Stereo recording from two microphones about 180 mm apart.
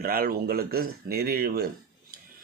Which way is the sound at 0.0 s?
55° right (ahead or behind).